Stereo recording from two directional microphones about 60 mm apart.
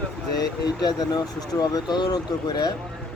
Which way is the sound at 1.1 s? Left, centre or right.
Left.